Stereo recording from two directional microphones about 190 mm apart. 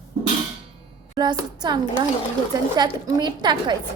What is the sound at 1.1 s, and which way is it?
A woman's voice, 20° right (ahead or behind).